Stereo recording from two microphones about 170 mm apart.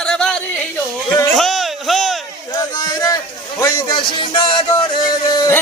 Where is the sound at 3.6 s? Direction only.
20° left (ahead or behind).